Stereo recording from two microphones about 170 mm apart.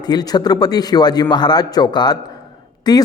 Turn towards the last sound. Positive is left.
turn(degrees=25)  # may be behind; listen again after turning